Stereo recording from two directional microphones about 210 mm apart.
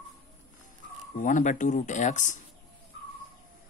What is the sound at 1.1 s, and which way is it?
Speech, 40° left (ahead or behind).